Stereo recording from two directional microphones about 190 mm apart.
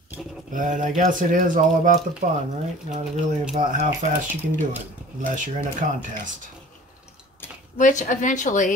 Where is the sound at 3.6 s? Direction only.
40° right (ahead or behind).